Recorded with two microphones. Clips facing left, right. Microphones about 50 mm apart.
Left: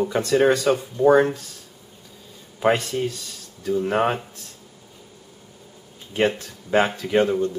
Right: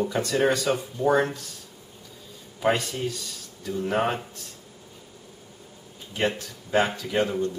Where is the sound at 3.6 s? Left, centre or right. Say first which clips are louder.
Left 4 dB; centre.